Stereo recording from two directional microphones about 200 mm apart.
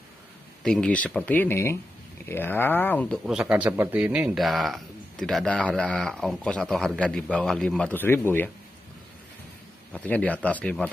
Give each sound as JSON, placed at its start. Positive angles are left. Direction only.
{"t": 0.7, "sound": "speech", "side_deg": 5}
{"t": 3.3, "sound": "speech", "side_deg": -5}
{"t": 9.9, "sound": "speech", "side_deg": 5}